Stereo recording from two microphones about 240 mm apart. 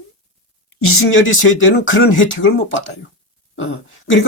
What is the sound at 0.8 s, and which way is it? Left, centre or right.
Speech, left.